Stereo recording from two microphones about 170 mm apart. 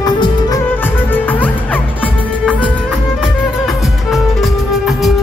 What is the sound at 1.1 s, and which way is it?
Music, 10° left (ahead or behind).